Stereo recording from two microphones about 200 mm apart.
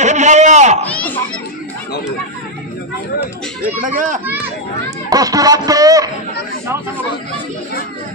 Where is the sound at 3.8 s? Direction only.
40° right (ahead or behind).